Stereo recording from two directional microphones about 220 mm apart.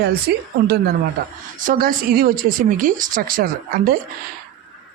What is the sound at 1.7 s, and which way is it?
Speech, 40° right (ahead or behind).